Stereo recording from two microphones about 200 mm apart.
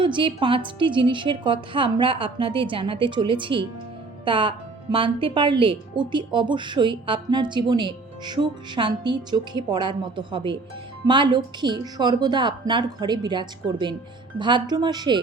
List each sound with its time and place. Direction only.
0.0 s a woman's voice: 25° right (ahead or behind)